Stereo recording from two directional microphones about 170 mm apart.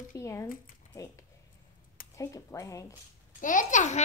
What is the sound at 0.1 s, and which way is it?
Speech, 15° left (ahead or behind).